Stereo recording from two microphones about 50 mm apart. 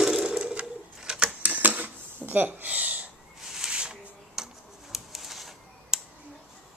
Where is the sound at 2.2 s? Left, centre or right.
Right.